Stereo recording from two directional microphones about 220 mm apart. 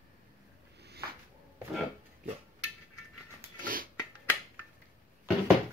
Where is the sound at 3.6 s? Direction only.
40° right (ahead or behind).